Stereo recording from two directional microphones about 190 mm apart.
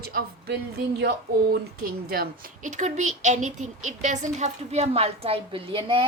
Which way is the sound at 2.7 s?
40° right (ahead or behind).